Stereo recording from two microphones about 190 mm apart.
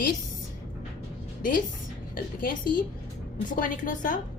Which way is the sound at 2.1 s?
50° left (ahead or behind).